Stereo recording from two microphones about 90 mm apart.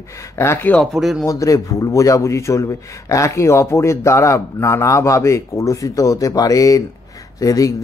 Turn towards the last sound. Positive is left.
turn(degrees=40)  # may be behind; listen again after turning